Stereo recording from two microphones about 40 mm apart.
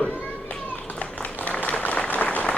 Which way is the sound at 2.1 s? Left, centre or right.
Left.